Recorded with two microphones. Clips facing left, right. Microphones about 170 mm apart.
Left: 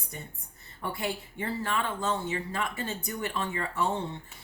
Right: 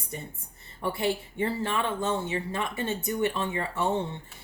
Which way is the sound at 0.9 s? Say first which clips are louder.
Right 5 dB; 25° right (ahead or behind).